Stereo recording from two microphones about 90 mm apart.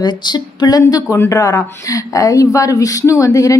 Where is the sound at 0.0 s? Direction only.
55° left (ahead or behind).